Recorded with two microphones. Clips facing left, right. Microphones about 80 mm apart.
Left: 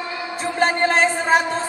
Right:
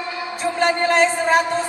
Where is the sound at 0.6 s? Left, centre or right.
Left.